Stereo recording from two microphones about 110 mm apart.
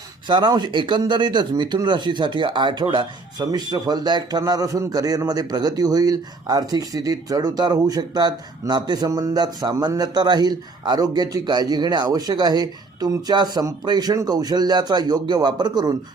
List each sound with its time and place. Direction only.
0.3 s speech: 45° right (ahead or behind)
3.4 s a man's voice: 35° right (ahead or behind)